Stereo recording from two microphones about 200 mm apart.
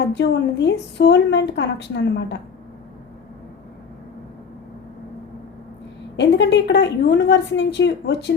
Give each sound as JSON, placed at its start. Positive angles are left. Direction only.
{"t": 0.1, "sound": "a woman's voice", "side_deg": 60}
{"t": 6.1, "sound": "a woman's voice", "side_deg": 60}